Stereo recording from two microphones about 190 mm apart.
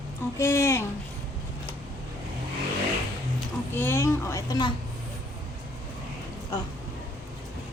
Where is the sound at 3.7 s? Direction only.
10° left (ahead or behind).